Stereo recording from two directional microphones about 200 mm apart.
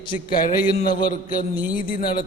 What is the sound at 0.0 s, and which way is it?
A man's voice, 25° left (ahead or behind).